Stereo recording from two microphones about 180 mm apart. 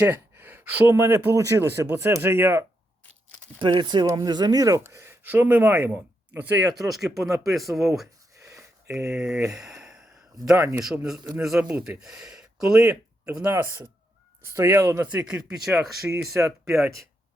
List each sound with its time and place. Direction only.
0.0 s speech: 10° right (ahead or behind)
3.6 s a man's voice: 25° right (ahead or behind); by 7.3 s centre (ahead or behind)
7.3 s speech: 20° right (ahead or behind)
7.5 s a man's voice: centre (ahead or behind)
8.4 s a sound: 15° right (ahead or behind)
9.0 s a man's voice: 5° right (ahead or behind)
9.6 s sigh: 5° right (ahead or behind)
10.3 s speech: 15° right (ahead or behind)
10.8 s a man's voice: 5° right (ahead or behind)
12.8 s speech: 15° right (ahead or behind)